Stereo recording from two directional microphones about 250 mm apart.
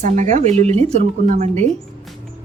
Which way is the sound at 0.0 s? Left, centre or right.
Right.